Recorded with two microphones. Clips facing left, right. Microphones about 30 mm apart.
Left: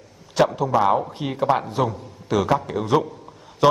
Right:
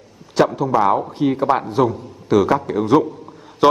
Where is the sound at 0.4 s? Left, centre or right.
Centre.